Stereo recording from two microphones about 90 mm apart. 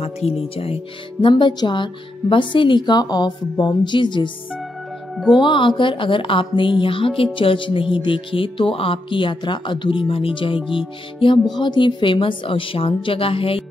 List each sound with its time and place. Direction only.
1.2 s a woman's voice: 55° left (ahead or behind)
5.4 s speech: 65° left (ahead or behind)
11.1 s speech: 60° left (ahead or behind); by 13.6 s 90° left